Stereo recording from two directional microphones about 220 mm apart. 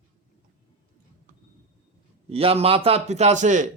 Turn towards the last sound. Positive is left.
turn(degrees=-35)  # may be behind; listen again after turning